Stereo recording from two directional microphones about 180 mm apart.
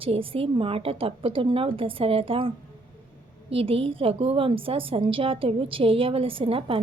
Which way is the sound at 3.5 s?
30° right (ahead or behind).